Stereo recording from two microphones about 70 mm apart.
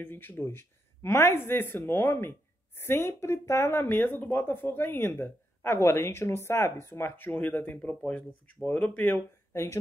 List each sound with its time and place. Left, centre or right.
0.0 s speech: left
3.9 s speech: left